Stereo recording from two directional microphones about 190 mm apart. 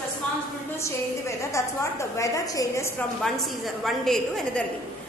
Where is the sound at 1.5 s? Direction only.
15° left (ahead or behind).